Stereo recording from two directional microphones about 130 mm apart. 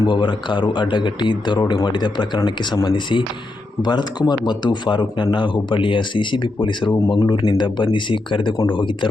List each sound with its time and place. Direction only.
0.0 s speech: 35° left (ahead or behind)
6.9 s speech: 25° left (ahead or behind)
7.3 s speech: 35° left (ahead or behind)